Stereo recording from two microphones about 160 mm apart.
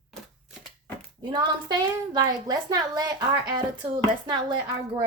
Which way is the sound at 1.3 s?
25° right (ahead or behind).